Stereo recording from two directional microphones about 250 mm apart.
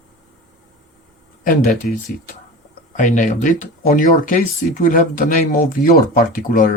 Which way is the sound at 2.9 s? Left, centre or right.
Left.